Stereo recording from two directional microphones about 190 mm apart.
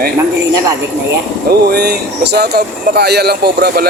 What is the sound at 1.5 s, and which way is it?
Speech, 55° right (ahead or behind).